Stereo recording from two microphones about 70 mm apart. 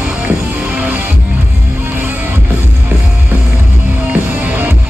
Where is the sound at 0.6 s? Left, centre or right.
Right.